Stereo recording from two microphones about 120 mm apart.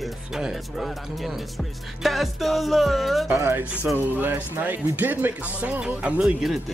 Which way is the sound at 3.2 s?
20° right (ahead or behind).